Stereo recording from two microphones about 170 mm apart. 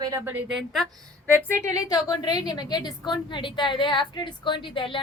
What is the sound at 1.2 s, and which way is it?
A woman's voice, 15° left (ahead or behind).